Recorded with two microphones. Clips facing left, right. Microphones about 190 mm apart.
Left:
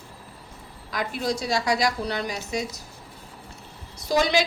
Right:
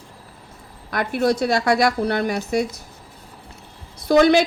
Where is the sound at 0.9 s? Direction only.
60° right (ahead or behind).